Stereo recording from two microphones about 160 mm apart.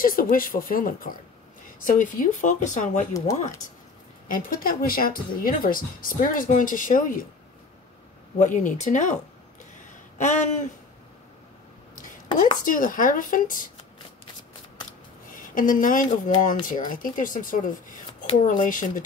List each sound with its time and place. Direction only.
0.0 s speech: 60° left (ahead or behind)
4.3 s speech: 60° left (ahead or behind)
8.4 s speech: 50° left (ahead or behind)
10.1 s speech: 50° left (ahead or behind)
12.6 s speech: 55° left (ahead or behind)
15.3 s speech: 60° left (ahead or behind)